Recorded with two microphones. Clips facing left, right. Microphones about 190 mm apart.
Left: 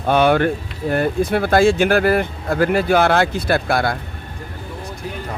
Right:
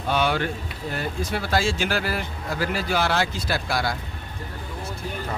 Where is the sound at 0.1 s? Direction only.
55° left (ahead or behind).